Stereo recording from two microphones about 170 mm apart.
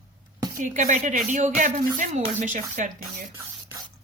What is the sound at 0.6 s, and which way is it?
Speech, 45° right (ahead or behind).